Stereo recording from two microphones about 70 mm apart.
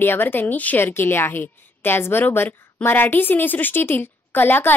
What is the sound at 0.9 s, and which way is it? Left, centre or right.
A woman's voice, left.